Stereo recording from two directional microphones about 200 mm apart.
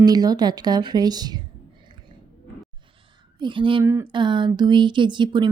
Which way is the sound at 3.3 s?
25° right (ahead or behind).